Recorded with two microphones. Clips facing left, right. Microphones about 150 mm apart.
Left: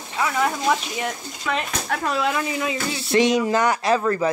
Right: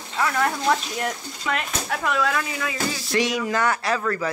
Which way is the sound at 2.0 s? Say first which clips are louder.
Even; 30° left (ahead or behind).